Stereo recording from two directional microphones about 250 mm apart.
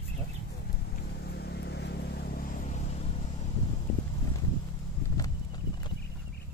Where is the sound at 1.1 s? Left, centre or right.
Left.